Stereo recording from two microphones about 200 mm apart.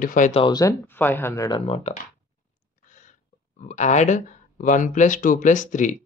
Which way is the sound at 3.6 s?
35° left (ahead or behind).